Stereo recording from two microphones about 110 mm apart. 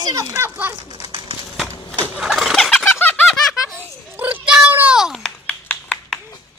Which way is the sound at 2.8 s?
15° left (ahead or behind).